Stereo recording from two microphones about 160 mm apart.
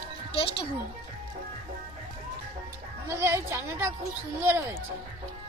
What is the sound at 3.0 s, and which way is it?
A woman's voice, 15° right (ahead or behind).